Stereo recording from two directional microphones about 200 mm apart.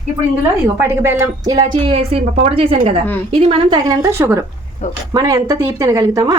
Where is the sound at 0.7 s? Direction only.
10° right (ahead or behind).